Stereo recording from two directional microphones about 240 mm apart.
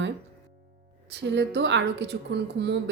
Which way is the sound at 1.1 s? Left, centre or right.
Right.